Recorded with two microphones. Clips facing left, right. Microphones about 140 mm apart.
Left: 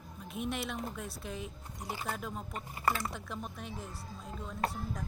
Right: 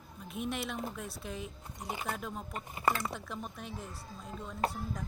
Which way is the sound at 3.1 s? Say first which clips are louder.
Even; centre (ahead or behind).